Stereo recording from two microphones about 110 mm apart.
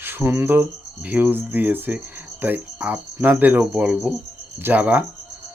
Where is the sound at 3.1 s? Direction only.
25° right (ahead or behind).